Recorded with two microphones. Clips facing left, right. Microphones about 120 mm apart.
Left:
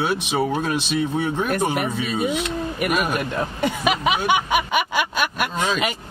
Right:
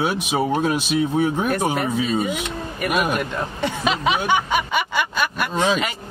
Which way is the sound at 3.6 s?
10° left (ahead or behind).